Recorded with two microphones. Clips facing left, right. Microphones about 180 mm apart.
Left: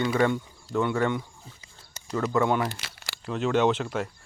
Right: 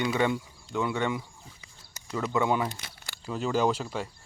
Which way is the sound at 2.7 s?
85° left.